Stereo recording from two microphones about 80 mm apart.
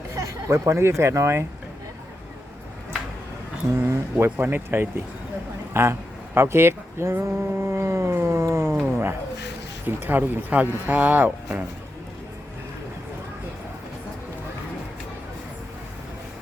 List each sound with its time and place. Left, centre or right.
0.1 s speech: right
3.8 s speech: right
8.9 s a sound: right
9.8 s speech: right